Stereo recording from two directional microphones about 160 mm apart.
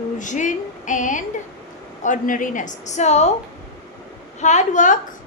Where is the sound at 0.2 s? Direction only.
50° left (ahead or behind).